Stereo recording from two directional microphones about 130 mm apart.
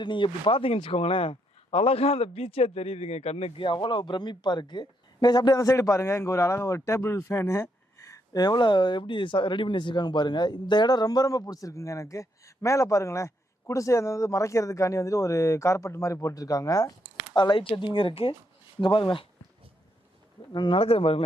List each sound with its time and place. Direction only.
0.0 s speech: 40° left (ahead or behind)
17.3 s speech: 35° left (ahead or behind)
20.5 s speech: 35° left (ahead or behind)